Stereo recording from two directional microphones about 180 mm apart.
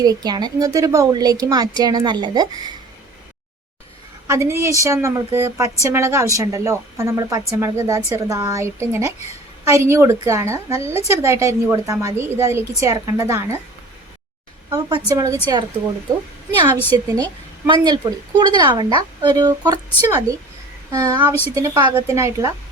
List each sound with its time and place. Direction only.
0.0 s speech: 20° right (ahead or behind)
4.3 s a woman's voice: 15° right (ahead or behind)
10.9 s speech: 35° left (ahead or behind)
11.2 s a woman's voice: 15° right (ahead or behind)
14.7 s speech: 20° right (ahead or behind)
16.9 s a woman's voice: 20° right (ahead or behind)